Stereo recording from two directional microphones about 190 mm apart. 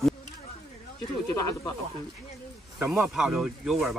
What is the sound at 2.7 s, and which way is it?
Speech, 15° right (ahead or behind).